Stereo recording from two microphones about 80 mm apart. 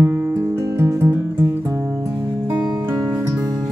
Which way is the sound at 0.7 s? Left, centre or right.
Right.